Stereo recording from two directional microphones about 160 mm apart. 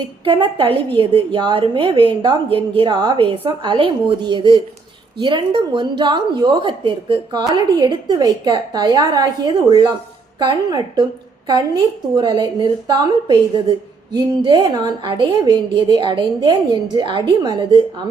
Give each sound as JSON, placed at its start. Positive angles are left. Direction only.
{"t": 0.3, "sound": "a woman's voice", "side_deg": -35}